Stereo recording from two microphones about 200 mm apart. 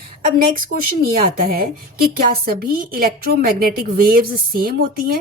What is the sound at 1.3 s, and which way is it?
Speech, 45° right (ahead or behind).